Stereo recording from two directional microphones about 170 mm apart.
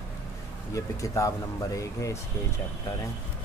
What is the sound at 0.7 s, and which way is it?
Speech, 20° left (ahead or behind).